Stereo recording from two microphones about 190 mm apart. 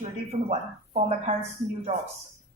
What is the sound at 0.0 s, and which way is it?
Speech, 35° right (ahead or behind).